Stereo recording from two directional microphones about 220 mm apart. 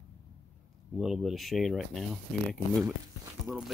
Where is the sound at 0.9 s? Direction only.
Centre (ahead or behind).